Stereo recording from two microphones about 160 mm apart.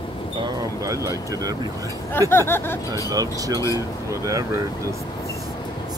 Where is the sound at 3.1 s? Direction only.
20° right (ahead or behind).